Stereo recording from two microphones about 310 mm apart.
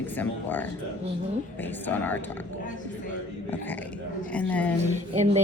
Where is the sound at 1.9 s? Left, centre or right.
Centre.